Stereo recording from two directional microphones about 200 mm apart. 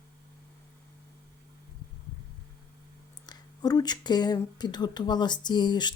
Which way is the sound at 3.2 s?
20° left (ahead or behind).